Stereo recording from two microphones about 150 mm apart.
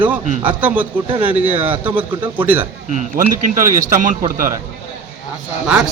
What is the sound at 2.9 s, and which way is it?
A man's voice, 55° right (ahead or behind).